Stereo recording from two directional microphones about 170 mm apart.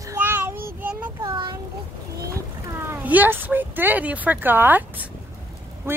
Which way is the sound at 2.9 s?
10° right (ahead or behind).